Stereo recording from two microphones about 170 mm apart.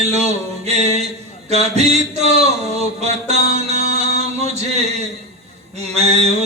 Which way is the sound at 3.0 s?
40° right (ahead or behind).